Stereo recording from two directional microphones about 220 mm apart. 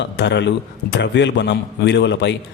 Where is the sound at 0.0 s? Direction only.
55° left (ahead or behind).